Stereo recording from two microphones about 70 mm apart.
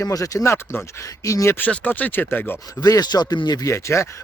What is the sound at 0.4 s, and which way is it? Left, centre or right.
Speech, left.